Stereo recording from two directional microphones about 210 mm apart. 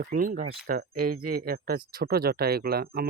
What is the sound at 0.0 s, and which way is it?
Speech, 40° right (ahead or behind).